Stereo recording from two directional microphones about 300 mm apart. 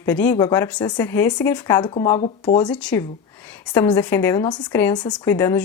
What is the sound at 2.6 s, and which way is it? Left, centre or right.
Speech, centre.